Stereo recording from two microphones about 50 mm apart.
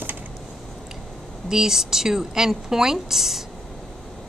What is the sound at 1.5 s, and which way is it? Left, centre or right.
A woman's voice, centre.